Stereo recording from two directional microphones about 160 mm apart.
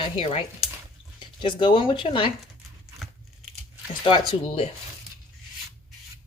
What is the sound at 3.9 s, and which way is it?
Speech, 30° left (ahead or behind).